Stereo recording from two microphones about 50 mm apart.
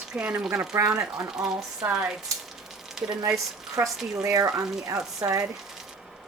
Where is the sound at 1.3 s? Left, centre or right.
Centre.